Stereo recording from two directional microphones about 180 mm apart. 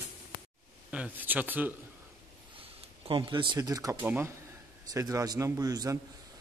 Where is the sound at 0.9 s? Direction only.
10° right (ahead or behind).